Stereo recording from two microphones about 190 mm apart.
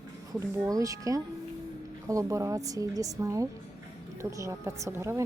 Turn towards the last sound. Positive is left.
turn(degrees=-15)  # may be behind; listen again after turning